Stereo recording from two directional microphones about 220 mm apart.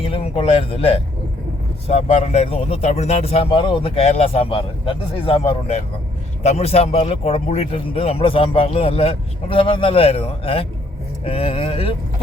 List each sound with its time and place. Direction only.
0.0 s a man's voice: 25° left (ahead or behind)